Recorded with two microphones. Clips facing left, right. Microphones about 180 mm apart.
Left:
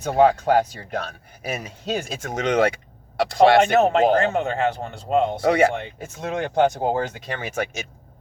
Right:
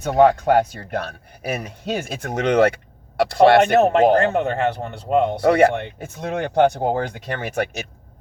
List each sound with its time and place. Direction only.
0.0 s speech: 60° right (ahead or behind)